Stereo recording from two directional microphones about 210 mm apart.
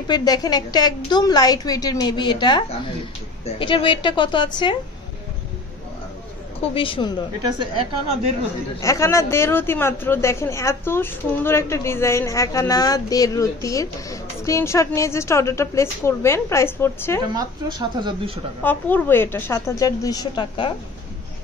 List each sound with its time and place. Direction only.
0.1 s a woman's voice: 20° left (ahead or behind)
6.6 s a woman's voice: 25° left (ahead or behind)
8.8 s a woman's voice: 15° left (ahead or behind)
17.6 s speech: 20° right (ahead or behind)
18.6 s a woman's voice: 10° left (ahead or behind)